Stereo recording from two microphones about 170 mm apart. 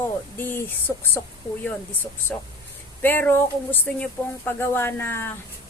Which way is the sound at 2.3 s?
5° left (ahead or behind).